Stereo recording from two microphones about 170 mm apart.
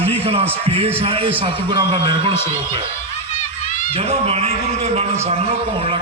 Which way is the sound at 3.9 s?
35° right (ahead or behind).